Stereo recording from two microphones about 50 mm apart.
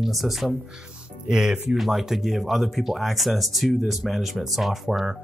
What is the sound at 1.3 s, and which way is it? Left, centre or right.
Speech, centre.